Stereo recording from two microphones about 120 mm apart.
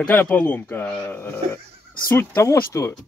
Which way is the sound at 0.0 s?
15° left (ahead or behind).